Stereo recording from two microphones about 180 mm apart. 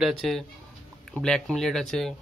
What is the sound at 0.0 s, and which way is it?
Speech, centre (ahead or behind).